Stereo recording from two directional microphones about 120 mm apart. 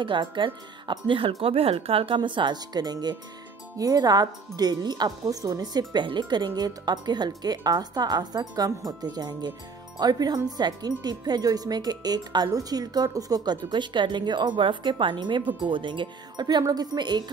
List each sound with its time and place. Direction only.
0.0 s wind chime: 40° right (ahead or behind)
1.4 s speech: 55° right (ahead or behind); by 3.2 s 35° right (ahead or behind)
3.7 s wind chime: 30° right (ahead or behind)